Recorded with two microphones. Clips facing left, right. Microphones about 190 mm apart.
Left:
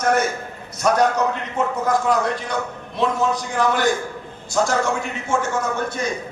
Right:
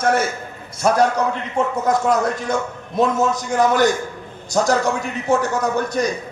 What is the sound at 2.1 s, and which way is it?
A man's voice, 45° right (ahead or behind).